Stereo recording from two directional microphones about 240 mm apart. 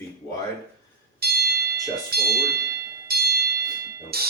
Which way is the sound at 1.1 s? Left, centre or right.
Right.